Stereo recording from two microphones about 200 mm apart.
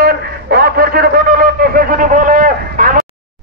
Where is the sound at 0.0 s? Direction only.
50° right (ahead or behind).